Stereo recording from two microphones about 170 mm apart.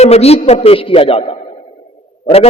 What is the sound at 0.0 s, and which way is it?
A man's voice, 40° left (ahead or behind).